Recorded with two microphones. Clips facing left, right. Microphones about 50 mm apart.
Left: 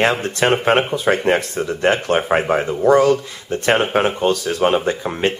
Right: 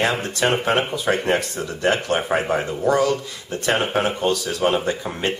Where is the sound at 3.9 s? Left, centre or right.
Left.